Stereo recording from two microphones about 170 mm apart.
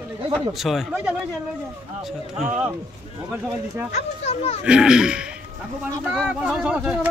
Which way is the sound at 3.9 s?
40° left (ahead or behind).